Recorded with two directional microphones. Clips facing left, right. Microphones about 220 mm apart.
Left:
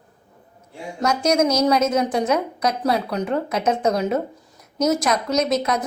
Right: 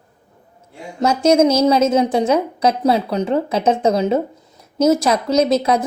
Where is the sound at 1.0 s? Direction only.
25° right (ahead or behind).